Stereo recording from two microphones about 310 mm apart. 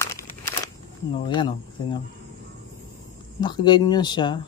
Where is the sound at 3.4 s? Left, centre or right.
Centre.